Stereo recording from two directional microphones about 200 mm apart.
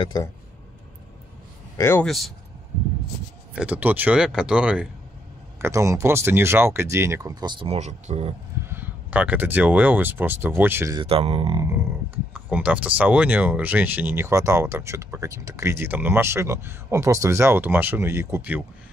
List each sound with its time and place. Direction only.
0.0 s speech: 20° left (ahead or behind)
1.8 s speech: 10° left (ahead or behind)
2.0 s speech: centre (ahead or behind)
3.5 s speech: 5° right (ahead or behind); by 8.3 s 35° right (ahead or behind)
8.6 s speech: 10° right (ahead or behind)
11.0 s speech: 30° right (ahead or behind)
12.4 s speech: 10° right (ahead or behind)